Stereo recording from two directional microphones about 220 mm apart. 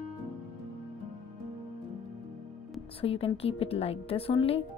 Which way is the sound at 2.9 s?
25° left (ahead or behind).